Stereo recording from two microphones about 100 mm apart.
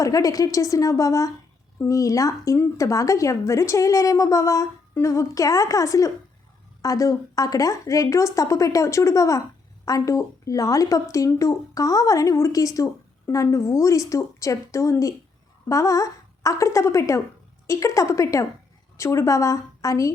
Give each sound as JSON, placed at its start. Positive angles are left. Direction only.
{"t": 0.0, "sound": "a woman's voice", "side_deg": 35}